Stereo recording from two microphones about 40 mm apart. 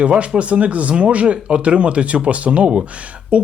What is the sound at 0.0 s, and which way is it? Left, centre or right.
Speech, right.